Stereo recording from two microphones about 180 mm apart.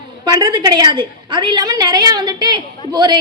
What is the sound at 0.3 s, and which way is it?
A woman's voice, 20° right (ahead or behind).